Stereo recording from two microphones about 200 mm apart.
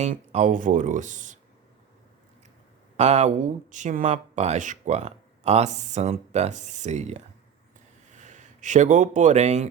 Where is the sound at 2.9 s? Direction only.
35° right (ahead or behind).